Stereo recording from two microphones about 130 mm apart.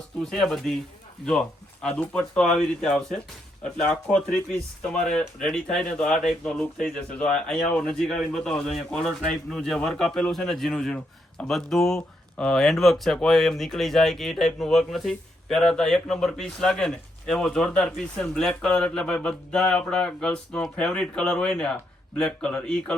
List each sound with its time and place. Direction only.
0.2 s speech: 5° left (ahead or behind)